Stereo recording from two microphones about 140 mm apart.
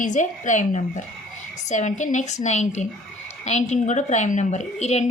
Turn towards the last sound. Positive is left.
turn(degrees=50)  # may be behind; listen again after turning